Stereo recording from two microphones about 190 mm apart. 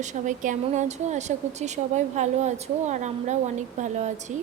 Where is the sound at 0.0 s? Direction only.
40° right (ahead or behind).